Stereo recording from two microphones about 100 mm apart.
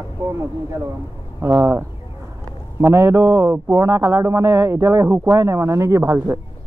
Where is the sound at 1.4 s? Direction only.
20° right (ahead or behind).